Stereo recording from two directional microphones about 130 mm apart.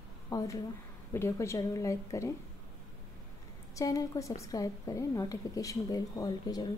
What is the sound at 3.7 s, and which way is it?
A woman's voice, 30° left (ahead or behind).